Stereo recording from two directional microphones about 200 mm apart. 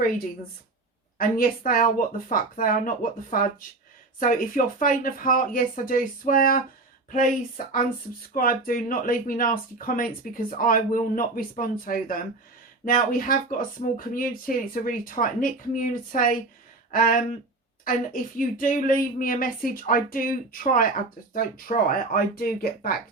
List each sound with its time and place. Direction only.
1.2 s speech: 45° left (ahead or behind)